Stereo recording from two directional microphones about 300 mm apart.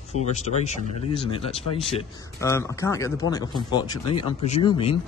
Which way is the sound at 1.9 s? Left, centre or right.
Centre.